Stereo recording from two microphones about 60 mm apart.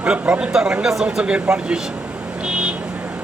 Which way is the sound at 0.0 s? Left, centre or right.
Centre.